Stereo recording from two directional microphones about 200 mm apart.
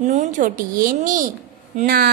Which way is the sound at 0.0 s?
35° right (ahead or behind).